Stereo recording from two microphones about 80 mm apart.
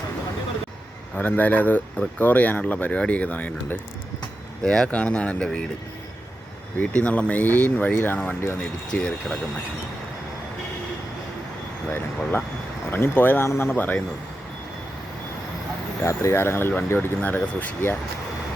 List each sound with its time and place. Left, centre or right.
1.1 s speech: centre
4.6 s speech: centre
4.9 s speech: centre
6.7 s speech: centre
8.9 s speech: centre
11.9 s speech: left
16.0 s speech: left